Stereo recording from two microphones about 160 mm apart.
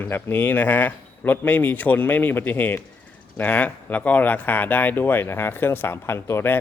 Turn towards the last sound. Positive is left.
turn(degrees=15)  # may be behind; listen again after turning